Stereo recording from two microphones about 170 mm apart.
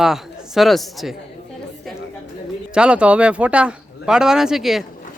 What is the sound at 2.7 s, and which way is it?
Speech, 5° right (ahead or behind).